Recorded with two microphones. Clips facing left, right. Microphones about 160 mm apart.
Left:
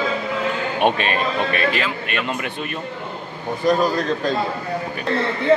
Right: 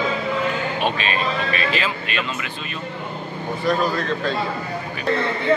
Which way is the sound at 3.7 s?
40° left (ahead or behind).